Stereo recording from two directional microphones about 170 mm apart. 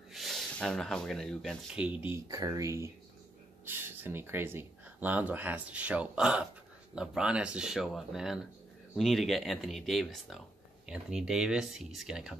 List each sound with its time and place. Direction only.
0.1 s speech: centre (ahead or behind)
1.8 s speech: 10° right (ahead or behind)